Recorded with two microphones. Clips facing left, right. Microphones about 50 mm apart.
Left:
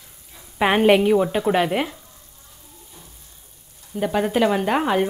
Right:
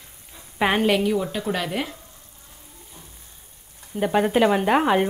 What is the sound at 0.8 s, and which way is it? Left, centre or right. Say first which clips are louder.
A woman's voice: left 5 dB; left.